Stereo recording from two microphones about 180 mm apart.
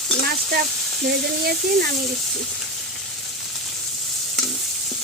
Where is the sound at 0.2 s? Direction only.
60° right (ahead or behind).